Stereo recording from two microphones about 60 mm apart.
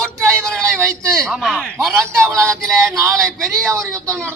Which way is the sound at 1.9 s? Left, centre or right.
Right.